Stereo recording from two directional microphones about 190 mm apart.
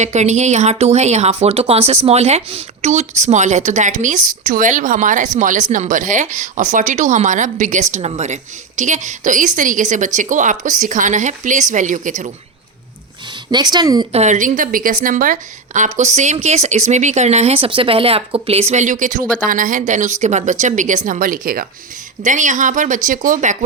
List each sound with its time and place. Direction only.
0.0 s a woman's voice: 35° right (ahead or behind)
13.5 s a woman's voice: 20° right (ahead or behind)
14.1 s a woman's voice: 35° right (ahead or behind)